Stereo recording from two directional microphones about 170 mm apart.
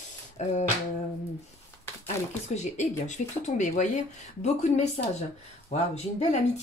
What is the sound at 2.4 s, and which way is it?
Speech, 40° left (ahead or behind).